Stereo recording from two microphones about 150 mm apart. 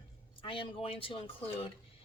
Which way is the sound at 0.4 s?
35° left (ahead or behind).